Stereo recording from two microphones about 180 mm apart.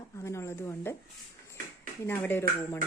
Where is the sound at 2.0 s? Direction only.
10° left (ahead or behind).